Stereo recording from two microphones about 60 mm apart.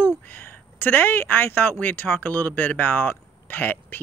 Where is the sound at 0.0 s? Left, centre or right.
Left.